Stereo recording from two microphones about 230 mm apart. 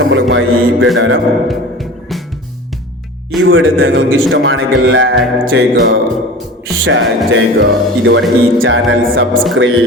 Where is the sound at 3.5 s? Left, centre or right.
Right.